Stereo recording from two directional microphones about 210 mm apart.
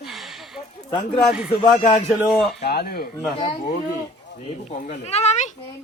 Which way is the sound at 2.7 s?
50° left (ahead or behind).